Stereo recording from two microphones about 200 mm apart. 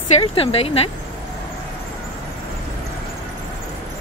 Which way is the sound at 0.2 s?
30° left (ahead or behind).